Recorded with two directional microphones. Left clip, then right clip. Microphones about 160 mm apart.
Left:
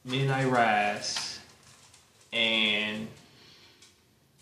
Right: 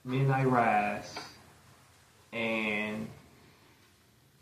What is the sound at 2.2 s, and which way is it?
Speech, 25° left (ahead or behind).